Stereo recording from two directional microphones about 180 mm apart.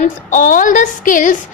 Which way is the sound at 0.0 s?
45° left (ahead or behind).